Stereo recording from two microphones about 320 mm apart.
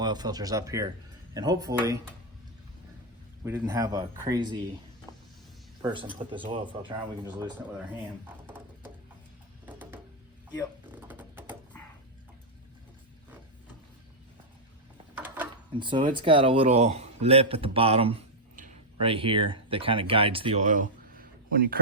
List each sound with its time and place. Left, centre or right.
0.0 s speech: centre
3.4 s speech: centre
5.1 s vehicle: centre
5.8 s speech: centre
9.6 s a sound: centre
11.1 s a sound: centre
15.2 s a man's voice: centre; by 21.8 s right